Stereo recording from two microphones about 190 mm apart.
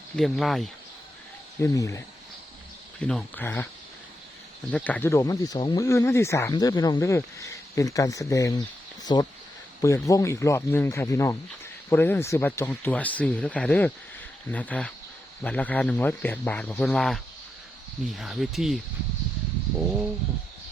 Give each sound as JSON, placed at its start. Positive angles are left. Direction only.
{"t": 0.2, "sound": "speech", "side_deg": 0}
{"t": 1.6, "sound": "speech", "side_deg": 15}
{"t": 3.0, "sound": "speech", "side_deg": 5}
{"t": 4.7, "sound": "speech", "side_deg": 10}
{"t": 18.2, "sound": "speech", "side_deg": 0}